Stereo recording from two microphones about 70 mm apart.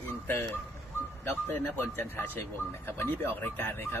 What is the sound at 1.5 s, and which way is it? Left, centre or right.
A man's voice, left.